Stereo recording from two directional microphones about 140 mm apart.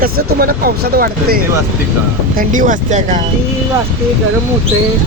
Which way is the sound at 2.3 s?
75° right (ahead or behind).